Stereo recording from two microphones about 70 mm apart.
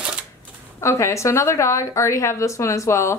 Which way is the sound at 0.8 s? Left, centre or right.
Left.